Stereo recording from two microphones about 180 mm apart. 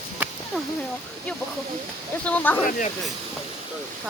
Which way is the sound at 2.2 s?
10° left (ahead or behind).